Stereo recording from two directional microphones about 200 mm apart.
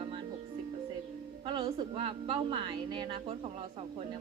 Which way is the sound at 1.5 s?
25° right (ahead or behind).